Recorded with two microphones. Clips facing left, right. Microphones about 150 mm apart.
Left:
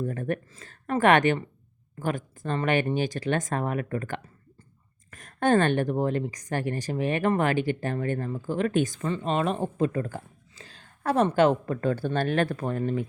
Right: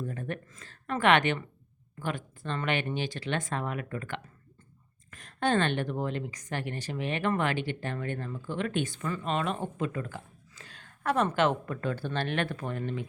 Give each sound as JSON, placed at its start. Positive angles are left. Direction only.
{"t": 0.0, "sound": "a sound", "side_deg": 50}
{"t": 0.9, "sound": "speech", "side_deg": 45}
{"t": 9.0, "sound": "speech", "side_deg": 30}